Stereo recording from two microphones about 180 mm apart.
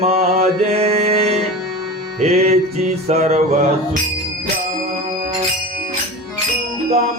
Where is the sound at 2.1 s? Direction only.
35° right (ahead or behind).